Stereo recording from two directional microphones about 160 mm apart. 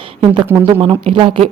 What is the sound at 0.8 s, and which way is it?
Speech, 35° right (ahead or behind).